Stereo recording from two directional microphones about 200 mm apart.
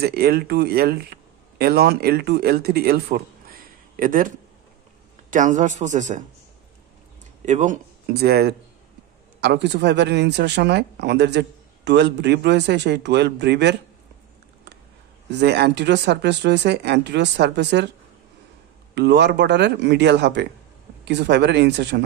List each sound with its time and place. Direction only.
0.0 s speech: 50° right (ahead or behind)
5.3 s speech: 40° right (ahead or behind)
7.4 s speech: 40° right (ahead or behind); by 13.7 s 60° right (ahead or behind)
15.3 s speech: 55° right (ahead or behind)
18.9 s speech: 55° right (ahead or behind)